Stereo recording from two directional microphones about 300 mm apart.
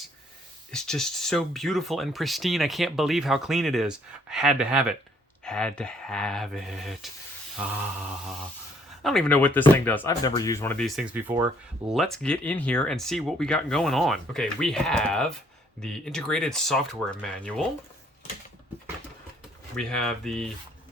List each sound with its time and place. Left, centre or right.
0.7 s speech: centre
9.0 s speech: centre
19.7 s speech: centre